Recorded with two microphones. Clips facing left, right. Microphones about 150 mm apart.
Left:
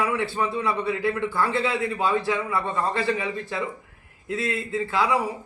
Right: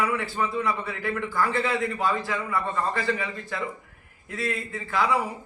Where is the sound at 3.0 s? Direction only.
20° left (ahead or behind).